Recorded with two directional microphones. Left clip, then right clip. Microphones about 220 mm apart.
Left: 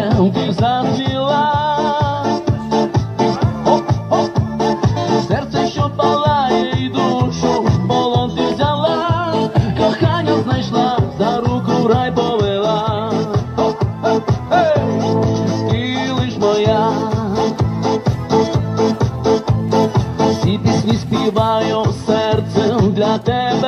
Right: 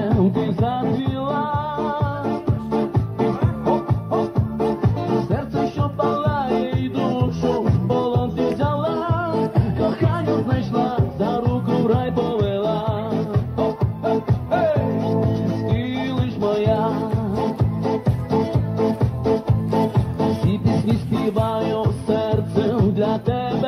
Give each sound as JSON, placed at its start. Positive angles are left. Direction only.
{"t": 0.0, "sound": "music", "side_deg": 50}